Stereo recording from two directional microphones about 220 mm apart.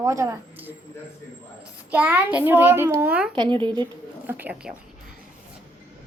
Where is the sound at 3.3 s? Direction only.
20° right (ahead or behind).